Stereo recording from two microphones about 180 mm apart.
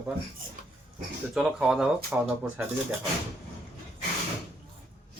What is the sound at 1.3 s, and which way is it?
Speech, 5° right (ahead or behind).